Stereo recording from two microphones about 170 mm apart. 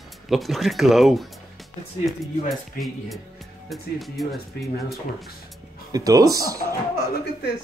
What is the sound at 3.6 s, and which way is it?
Speech, centre (ahead or behind).